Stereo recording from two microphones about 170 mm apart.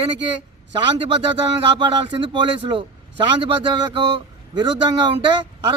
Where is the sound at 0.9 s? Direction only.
30° right (ahead or behind).